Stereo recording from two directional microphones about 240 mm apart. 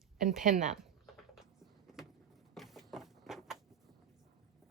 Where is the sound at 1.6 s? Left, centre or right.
Centre.